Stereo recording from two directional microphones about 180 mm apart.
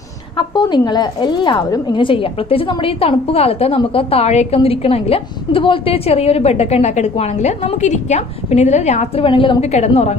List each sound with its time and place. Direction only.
0.4 s a woman's voice: 25° left (ahead or behind)